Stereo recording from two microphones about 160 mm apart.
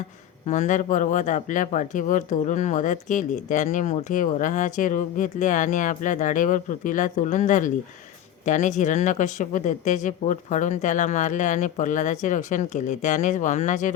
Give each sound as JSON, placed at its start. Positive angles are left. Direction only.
{"t": 0.4, "sound": "speech", "side_deg": 50}